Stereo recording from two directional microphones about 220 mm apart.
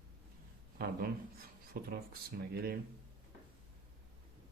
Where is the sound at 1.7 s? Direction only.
45° right (ahead or behind).